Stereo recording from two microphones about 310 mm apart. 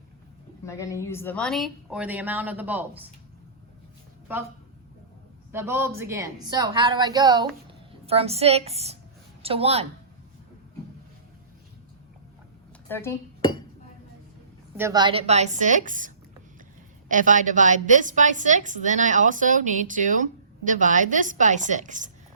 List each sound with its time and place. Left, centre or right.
0.6 s speech: centre
5.5 s a woman's voice: centre
12.9 s dishes: centre
14.8 s a woman's voice: centre